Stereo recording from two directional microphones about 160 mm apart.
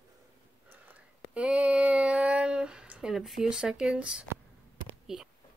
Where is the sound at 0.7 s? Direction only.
10° right (ahead or behind).